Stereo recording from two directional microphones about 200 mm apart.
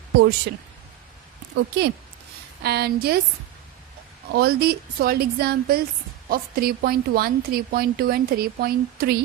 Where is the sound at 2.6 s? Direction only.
50° right (ahead or behind).